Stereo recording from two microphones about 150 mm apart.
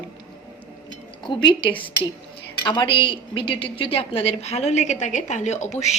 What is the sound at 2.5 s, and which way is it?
A woman's voice, 30° left (ahead or behind).